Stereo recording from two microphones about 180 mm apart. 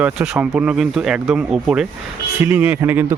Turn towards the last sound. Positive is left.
turn(degrees=-10)  # may be behind; listen again after turning